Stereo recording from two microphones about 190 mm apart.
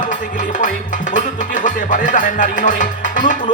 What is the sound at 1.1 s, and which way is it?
Music, 45° left (ahead or behind).